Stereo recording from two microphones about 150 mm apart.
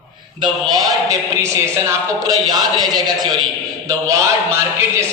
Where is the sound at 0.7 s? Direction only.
25° right (ahead or behind).